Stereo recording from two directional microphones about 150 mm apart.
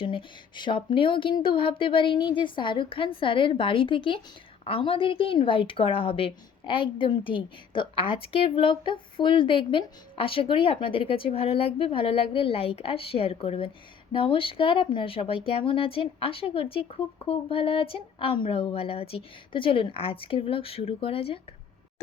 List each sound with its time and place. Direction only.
0.0 s a woman's voice: 35° left (ahead or behind)